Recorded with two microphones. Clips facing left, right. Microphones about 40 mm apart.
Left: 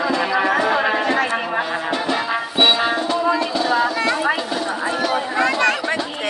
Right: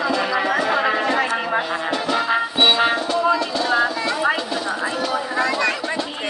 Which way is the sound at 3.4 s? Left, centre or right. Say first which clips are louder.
Left 1 dB; centre.